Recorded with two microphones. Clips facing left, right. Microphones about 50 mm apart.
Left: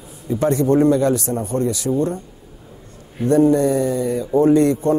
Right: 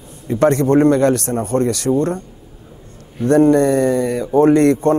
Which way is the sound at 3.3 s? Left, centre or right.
Right.